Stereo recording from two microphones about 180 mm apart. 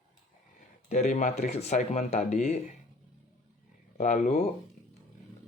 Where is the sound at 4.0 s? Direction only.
40° left (ahead or behind).